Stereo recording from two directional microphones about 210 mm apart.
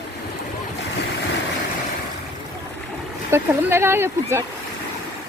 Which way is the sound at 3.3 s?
10° right (ahead or behind).